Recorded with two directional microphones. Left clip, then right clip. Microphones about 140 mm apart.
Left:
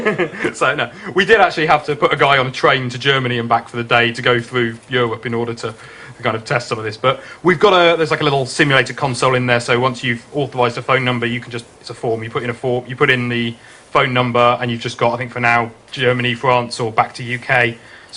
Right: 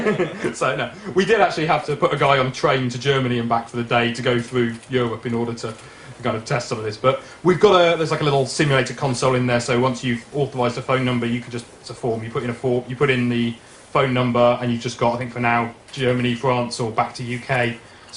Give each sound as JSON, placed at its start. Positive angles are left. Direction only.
{"t": 0.3, "sound": "a man's voice", "side_deg": 15}
{"t": 15.4, "sound": "speech", "side_deg": 35}
{"t": 15.9, "sound": "a man's voice", "side_deg": 15}